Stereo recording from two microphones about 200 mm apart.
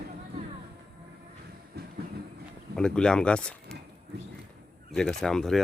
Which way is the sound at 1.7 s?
55° right (ahead or behind).